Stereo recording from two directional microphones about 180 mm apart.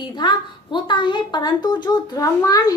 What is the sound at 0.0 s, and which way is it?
A woman's voice, 25° left (ahead or behind).